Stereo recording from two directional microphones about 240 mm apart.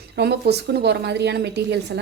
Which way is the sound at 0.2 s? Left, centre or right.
Right.